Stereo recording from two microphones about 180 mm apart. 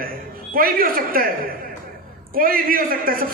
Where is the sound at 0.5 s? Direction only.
55° right (ahead or behind).